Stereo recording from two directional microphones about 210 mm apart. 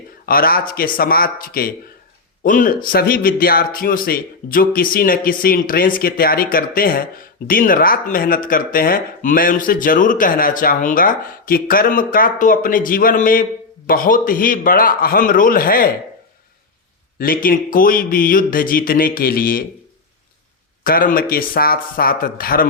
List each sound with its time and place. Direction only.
0.3 s speech: 45° left (ahead or behind)
17.2 s speech: 45° left (ahead or behind)
20.8 s speech: 45° left (ahead or behind)